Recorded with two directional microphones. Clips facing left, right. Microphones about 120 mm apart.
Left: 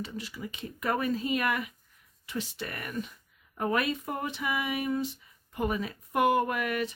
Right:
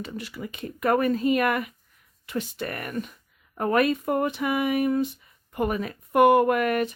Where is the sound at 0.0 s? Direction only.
60° right (ahead or behind).